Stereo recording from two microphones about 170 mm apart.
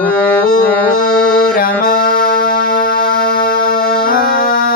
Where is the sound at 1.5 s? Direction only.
55° left (ahead or behind).